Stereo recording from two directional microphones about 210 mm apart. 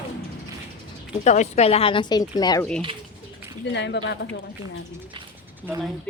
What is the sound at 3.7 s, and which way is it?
Speech, 55° left (ahead or behind).